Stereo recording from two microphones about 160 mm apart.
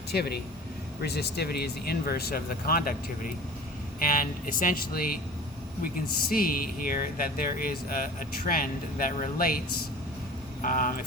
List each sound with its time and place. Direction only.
0.1 s speech: 80° left; by 5.1 s 60° left (ahead or behind)
6.2 s speech: 65° left (ahead or behind)
10.6 s speech: 60° left (ahead or behind)